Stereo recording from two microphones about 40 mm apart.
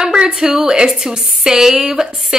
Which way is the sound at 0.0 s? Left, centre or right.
Right.